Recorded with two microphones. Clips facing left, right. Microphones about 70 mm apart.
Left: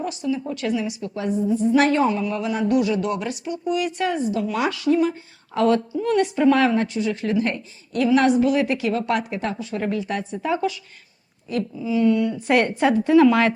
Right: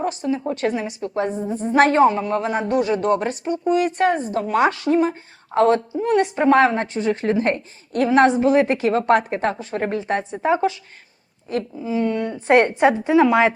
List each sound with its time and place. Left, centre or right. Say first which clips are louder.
0.0 s a woman's voice: right 3 dB; right